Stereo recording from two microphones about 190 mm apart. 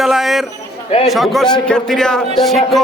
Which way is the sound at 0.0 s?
Centre (ahead or behind).